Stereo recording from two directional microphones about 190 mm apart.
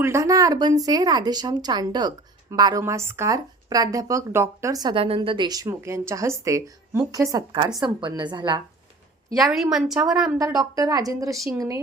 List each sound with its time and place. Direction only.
0.0 s speech: 15° right (ahead or behind)
9.3 s a woman's voice: centre (ahead or behind)
10.3 s speech: 20° right (ahead or behind)